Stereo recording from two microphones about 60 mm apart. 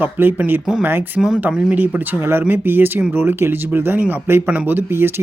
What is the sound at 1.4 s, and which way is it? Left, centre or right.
Speech, right.